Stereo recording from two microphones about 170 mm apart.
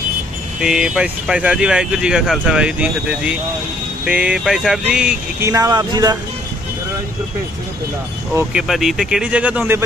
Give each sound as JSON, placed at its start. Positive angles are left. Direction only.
{"t": 0.6, "sound": "speech", "side_deg": -5}
{"t": 5.5, "sound": "speech", "side_deg": -20}
{"t": 8.5, "sound": "speech", "side_deg": 0}